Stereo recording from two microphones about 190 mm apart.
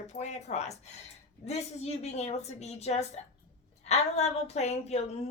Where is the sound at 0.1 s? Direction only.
35° left (ahead or behind).